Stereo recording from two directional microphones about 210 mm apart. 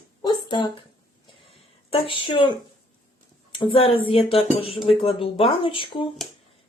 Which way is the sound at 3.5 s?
25° left (ahead or behind).